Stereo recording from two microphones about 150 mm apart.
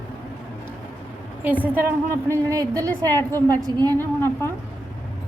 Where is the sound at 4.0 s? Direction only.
15° left (ahead or behind).